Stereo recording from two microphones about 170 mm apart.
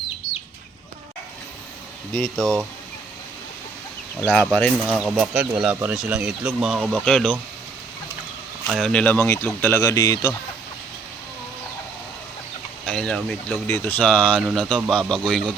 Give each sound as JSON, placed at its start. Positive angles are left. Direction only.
{"t": 2.1, "sound": "speech", "side_deg": 5}
{"t": 4.3, "sound": "speech", "side_deg": 5}
{"t": 8.6, "sound": "speech", "side_deg": 0}
{"t": 12.8, "sound": "speech", "side_deg": 5}
{"t": 13.7, "sound": "speech", "side_deg": 15}